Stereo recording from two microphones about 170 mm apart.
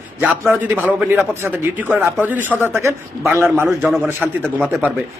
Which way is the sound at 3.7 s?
Centre (ahead or behind).